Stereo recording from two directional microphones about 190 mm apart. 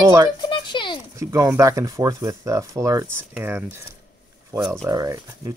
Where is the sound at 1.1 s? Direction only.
15° right (ahead or behind).